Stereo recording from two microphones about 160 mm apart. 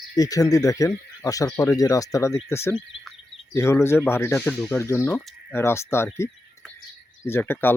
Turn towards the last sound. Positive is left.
turn(degrees=10)  # may be behind; listen again after turning